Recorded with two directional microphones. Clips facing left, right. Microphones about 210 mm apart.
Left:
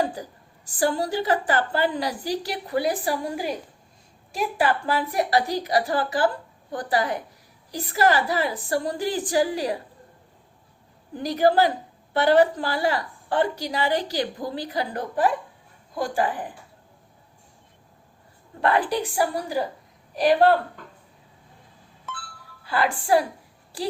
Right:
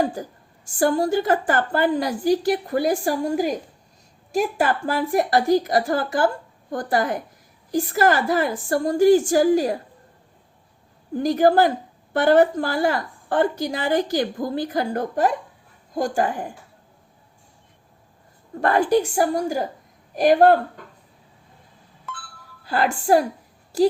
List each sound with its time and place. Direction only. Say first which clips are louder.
0.2 s a woman's voice: right 4 dB; 50° right (ahead or behind)
11.1 s a woman's voice: right 3 dB; 50° right (ahead or behind)
18.6 s a woman's voice: right 4 dB; 45° right (ahead or behind)
22.6 s a woman's voice: right 3 dB; 45° right (ahead or behind)